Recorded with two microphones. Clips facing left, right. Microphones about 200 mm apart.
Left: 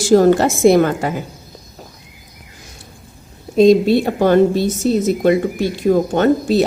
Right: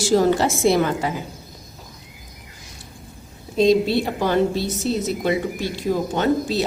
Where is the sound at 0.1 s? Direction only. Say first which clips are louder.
Left 7 dB; 50° left (ahead or behind).